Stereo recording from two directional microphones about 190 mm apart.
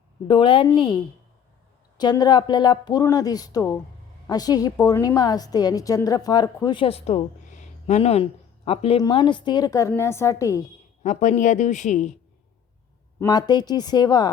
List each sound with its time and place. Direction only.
0.3 s a woman's voice: 25° left (ahead or behind)
2.0 s a woman's voice: 20° left (ahead or behind)
11.0 s speech: 40° left (ahead or behind)
13.1 s a woman's voice: 20° left (ahead or behind)